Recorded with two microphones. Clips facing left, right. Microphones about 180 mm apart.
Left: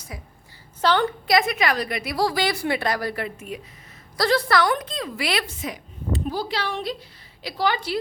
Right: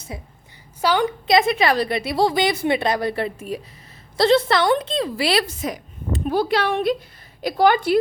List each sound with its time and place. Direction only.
0.1 s a woman's voice: 25° right (ahead or behind)
0.8 s a woman's voice: 10° right (ahead or behind)
1.3 s a woman's voice: 25° right (ahead or behind)
4.2 s a woman's voice: 25° right (ahead or behind); by 6.2 s 40° right (ahead or behind)
6.2 s a woman's voice: 60° right (ahead or behind)